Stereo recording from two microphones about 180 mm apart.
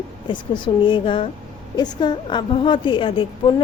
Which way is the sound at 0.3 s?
25° left (ahead or behind).